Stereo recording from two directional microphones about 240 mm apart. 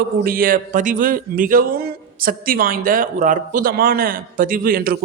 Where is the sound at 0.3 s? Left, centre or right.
Right.